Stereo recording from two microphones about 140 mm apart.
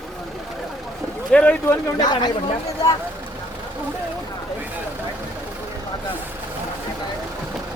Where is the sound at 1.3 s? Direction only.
10° left (ahead or behind).